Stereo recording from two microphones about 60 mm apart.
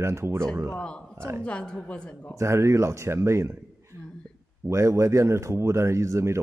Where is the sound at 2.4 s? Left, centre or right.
Right.